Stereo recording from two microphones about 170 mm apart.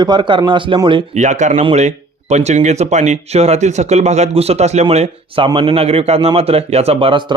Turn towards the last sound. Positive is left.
turn(degrees=-30)  # may be behind; listen again after turning